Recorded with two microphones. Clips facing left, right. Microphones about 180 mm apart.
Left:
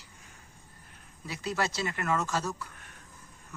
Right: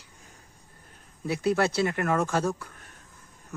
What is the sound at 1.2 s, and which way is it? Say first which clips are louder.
Speech: right 8 dB; 60° right (ahead or behind).